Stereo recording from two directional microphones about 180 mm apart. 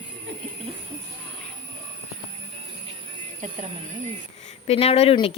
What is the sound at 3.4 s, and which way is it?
Music, 40° right (ahead or behind).